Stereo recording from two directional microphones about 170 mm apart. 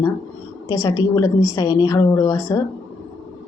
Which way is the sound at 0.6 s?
20° left (ahead or behind).